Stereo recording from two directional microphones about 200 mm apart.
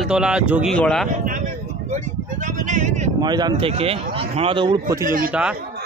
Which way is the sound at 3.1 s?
20° right (ahead or behind).